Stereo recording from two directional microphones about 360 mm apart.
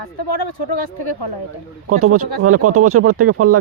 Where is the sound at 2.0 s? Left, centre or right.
Right.